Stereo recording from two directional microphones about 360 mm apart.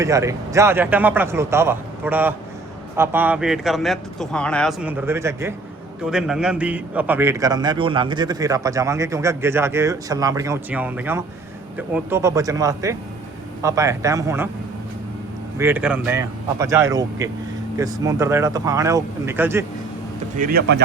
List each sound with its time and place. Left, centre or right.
0.0 s a man's voice: centre
15.5 s a man's voice: centre
20.3 s speech: right